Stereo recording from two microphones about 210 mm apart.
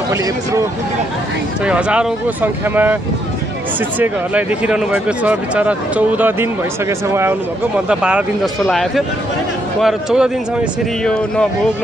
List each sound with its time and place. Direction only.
1.6 s speech: 5° right (ahead or behind)
4.0 s a man's voice: 5° right (ahead or behind)